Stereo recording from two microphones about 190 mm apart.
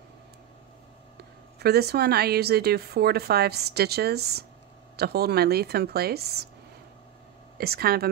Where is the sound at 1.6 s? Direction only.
60° right (ahead or behind).